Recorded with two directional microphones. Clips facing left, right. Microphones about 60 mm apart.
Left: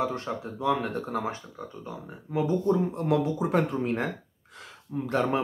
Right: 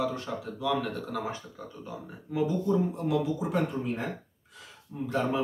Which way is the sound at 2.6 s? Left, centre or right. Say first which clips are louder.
Left 2 dB; left.